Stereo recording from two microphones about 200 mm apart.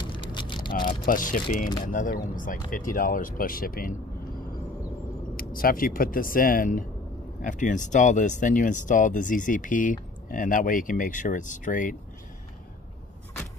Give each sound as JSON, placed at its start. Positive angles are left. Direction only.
{"t": 0.0, "sound": "vehicle", "side_deg": 25}
{"t": 0.7, "sound": "speech", "side_deg": 45}
{"t": 5.3, "sound": "speech", "side_deg": 45}